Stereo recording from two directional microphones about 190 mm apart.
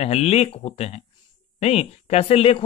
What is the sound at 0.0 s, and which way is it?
A woman's voice, 35° left (ahead or behind).